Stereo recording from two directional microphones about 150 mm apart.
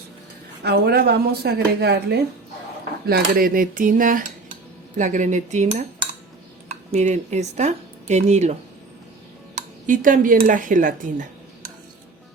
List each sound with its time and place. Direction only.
0.6 s a woman's voice: 90° right
3.1 s speech: 75° right (ahead or behind); by 8.5 s 50° right (ahead or behind)
9.6 s speech: 60° right (ahead or behind)